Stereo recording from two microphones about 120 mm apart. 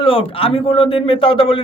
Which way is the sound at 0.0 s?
50° left (ahead or behind).